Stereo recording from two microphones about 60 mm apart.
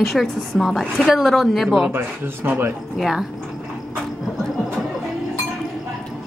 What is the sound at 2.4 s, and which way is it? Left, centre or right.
Speech, right.